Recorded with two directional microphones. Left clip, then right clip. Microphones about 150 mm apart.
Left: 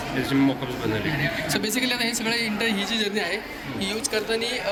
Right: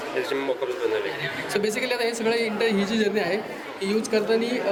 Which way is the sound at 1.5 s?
5° right (ahead or behind).